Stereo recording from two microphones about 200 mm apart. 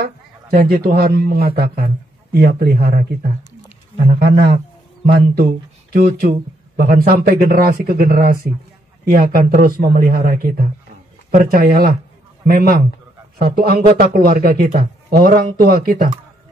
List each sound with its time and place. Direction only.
0.0 s a man's voice: 50° right (ahead or behind)